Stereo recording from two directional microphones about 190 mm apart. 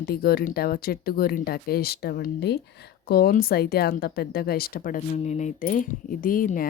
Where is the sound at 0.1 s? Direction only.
55° left (ahead or behind).